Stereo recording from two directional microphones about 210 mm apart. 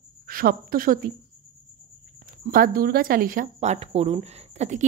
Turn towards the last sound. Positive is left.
turn(degrees=-35)  # may be behind; listen again after turning